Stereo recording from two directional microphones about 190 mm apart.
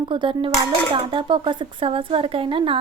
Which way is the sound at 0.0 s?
25° right (ahead or behind).